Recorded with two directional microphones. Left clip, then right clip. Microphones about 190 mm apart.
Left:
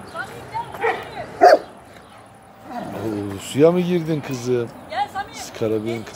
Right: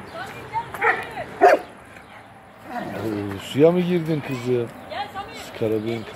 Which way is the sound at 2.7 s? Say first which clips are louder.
Left 1 dB; centre (ahead or behind).